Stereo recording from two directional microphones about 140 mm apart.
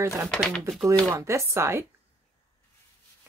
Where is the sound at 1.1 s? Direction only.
20° right (ahead or behind).